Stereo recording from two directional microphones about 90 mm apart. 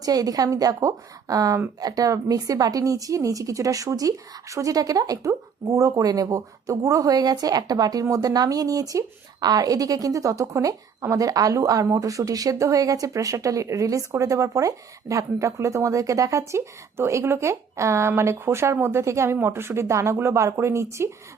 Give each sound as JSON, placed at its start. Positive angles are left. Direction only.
{"t": 0.0, "sound": "speech", "side_deg": -45}